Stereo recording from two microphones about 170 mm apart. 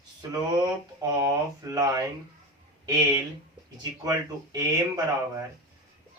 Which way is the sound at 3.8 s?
20° right (ahead or behind).